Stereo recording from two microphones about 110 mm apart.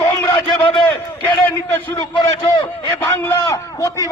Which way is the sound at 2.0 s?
45° left (ahead or behind).